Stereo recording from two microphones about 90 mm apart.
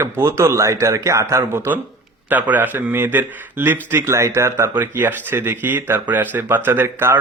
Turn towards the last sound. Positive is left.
turn(degrees=-25)  # may be behind; listen again after turning